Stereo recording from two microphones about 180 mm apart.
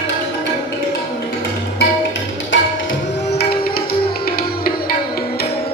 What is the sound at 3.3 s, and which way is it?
Music, 60° left (ahead or behind).